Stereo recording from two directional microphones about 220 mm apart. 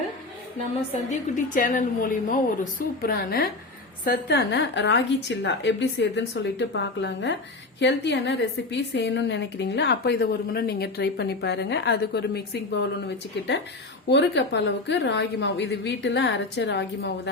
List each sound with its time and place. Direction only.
1.5 s a woman's voice: 35° left (ahead or behind)
14.1 s a woman's voice: 50° left (ahead or behind)